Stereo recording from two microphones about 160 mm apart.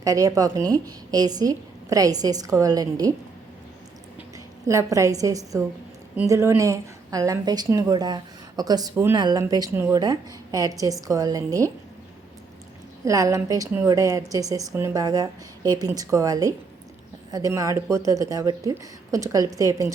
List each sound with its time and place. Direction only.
0.0 s a woman's voice: 20° right (ahead or behind)
4.6 s a woman's voice: 20° right (ahead or behind)
13.1 s a woman's voice: 20° right (ahead or behind)